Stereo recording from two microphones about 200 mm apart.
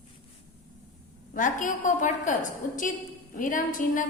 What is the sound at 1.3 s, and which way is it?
A woman's voice, 40° left (ahead or behind).